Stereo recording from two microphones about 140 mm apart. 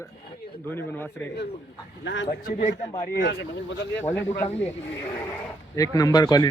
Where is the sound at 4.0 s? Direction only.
15° left (ahead or behind).